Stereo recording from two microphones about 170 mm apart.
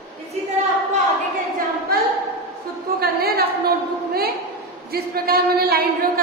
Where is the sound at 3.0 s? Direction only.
65° right (ahead or behind).